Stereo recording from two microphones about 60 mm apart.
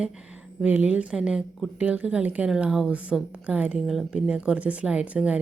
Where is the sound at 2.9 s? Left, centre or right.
Right.